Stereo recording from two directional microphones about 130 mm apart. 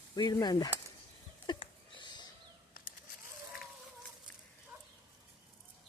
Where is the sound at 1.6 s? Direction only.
35° left (ahead or behind).